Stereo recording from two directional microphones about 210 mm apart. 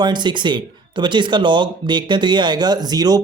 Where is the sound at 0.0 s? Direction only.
20° right (ahead or behind).